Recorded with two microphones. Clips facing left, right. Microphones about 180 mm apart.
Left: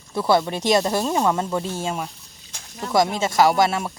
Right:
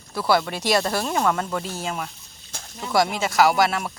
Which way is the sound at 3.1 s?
25° left (ahead or behind).